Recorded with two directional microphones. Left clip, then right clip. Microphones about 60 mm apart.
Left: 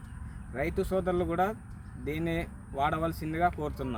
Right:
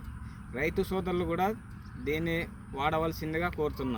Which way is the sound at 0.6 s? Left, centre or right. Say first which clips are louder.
Left 1 dB; left.